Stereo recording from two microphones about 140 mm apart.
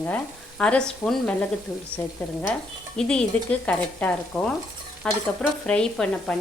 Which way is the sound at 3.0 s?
5° left (ahead or behind).